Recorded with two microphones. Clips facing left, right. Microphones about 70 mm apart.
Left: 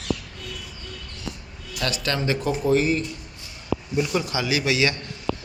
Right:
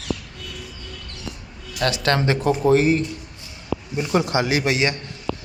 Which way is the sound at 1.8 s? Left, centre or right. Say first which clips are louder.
Right 5 dB; right.